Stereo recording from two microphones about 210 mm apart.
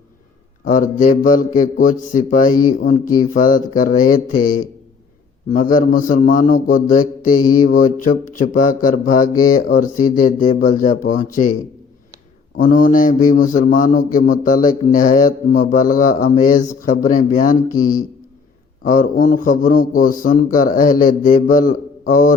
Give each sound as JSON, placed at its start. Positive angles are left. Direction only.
{"t": 0.6, "sound": "a man's voice", "side_deg": 40}
{"t": 12.5, "sound": "a man's voice", "side_deg": 40}
{"t": 18.8, "sound": "a man's voice", "side_deg": 40}